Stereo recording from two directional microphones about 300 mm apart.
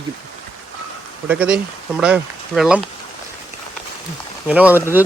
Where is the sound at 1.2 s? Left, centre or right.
Centre.